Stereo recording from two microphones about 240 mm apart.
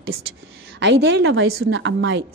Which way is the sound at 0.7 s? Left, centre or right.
Right.